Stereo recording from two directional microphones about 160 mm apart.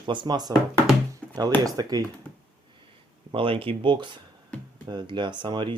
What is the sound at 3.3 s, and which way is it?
Speech, 35° right (ahead or behind).